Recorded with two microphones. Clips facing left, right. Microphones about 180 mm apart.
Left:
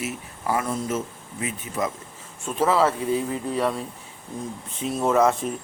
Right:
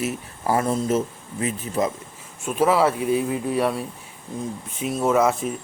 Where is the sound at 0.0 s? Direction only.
35° right (ahead or behind).